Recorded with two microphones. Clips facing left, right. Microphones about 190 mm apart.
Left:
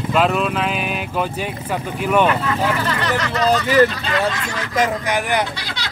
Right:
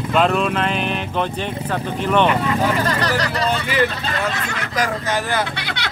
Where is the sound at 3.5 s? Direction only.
40° left (ahead or behind).